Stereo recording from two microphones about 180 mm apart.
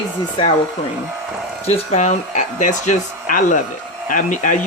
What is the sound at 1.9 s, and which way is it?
Speech, 40° left (ahead or behind).